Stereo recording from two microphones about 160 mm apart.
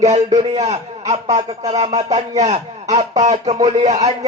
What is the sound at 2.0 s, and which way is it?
Speech, 40° right (ahead or behind).